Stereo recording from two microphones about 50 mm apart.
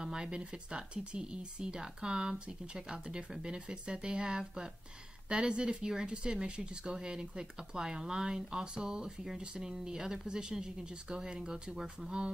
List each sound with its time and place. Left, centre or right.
0.0 s speech: centre